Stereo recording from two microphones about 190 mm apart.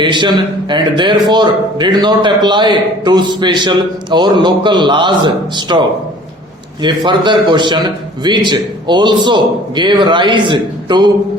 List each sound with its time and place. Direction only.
0.0 s a man's voice: 25° right (ahead or behind)
6.8 s a man's voice: 25° right (ahead or behind)